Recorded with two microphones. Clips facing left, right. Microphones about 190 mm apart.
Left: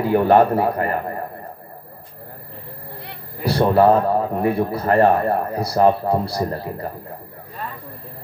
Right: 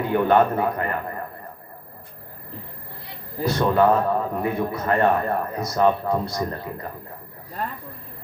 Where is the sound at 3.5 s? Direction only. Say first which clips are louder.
Left 4 dB; 35° left (ahead or behind).